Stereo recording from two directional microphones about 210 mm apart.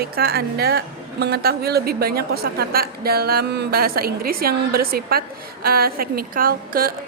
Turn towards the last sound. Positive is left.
turn(degrees=-45)  # may be behind; listen again after turning